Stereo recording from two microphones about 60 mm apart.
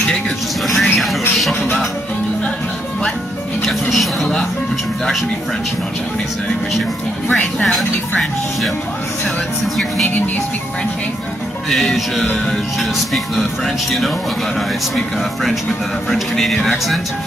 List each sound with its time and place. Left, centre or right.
0.7 s music: centre
3.9 s speech: centre
10.0 s speech: left
11.7 s speech: centre
16.1 s speech: centre